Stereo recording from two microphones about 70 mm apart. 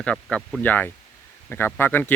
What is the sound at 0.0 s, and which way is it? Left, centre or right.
Speech, centre.